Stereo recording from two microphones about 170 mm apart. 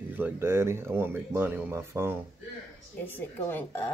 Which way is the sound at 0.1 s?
10° right (ahead or behind).